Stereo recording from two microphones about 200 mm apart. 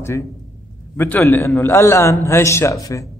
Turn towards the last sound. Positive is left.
turn(degrees=15)  # may be behind; listen again after turning